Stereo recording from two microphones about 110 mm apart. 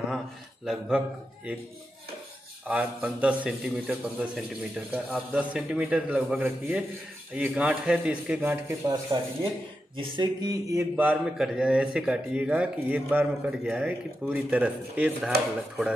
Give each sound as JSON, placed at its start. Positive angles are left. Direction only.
{"t": 0.7, "sound": "speech", "side_deg": -5}
{"t": 2.6, "sound": "speech", "side_deg": -15}
{"t": 9.1, "sound": "speech", "side_deg": -35}
{"t": 11.0, "sound": "speech", "side_deg": -10}